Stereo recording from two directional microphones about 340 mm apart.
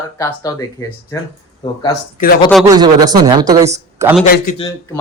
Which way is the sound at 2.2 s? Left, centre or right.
Left.